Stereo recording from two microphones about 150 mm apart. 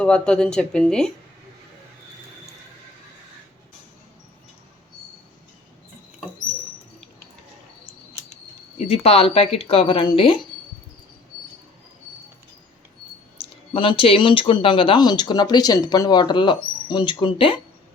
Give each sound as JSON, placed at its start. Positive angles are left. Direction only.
{"t": 0.0, "sound": "speech", "side_deg": 5}
{"t": 8.8, "sound": "speech", "side_deg": 45}
{"t": 13.7, "sound": "speech", "side_deg": 35}